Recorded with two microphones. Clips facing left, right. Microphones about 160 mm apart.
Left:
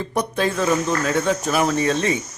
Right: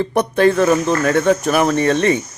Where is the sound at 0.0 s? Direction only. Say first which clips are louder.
Right 8 dB; 65° right (ahead or behind).